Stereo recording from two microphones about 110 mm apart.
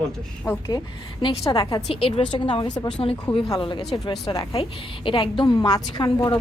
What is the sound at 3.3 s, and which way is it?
A woman's voice, 55° left (ahead or behind).